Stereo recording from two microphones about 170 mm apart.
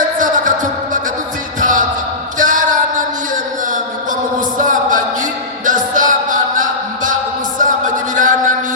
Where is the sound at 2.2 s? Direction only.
50° right (ahead or behind).